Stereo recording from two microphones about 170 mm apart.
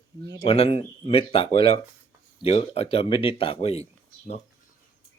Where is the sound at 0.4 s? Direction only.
35° left (ahead or behind).